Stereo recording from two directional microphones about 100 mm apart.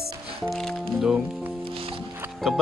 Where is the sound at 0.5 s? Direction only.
Centre (ahead or behind).